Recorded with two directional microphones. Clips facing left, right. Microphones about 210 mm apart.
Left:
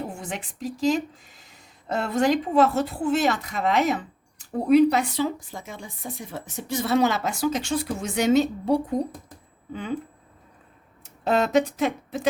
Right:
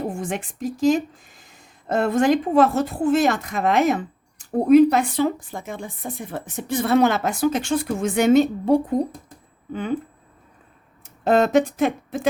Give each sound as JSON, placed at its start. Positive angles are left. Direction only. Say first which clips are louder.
{"t": 0.2, "sound": "speech", "louder": "right 6 dB", "side_deg": -50}
{"t": 11.2, "sound": "speech", "louder": "right 4 dB", "side_deg": -50}